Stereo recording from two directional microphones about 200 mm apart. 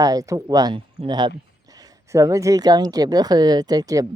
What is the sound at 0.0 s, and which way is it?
Speech, 20° right (ahead or behind).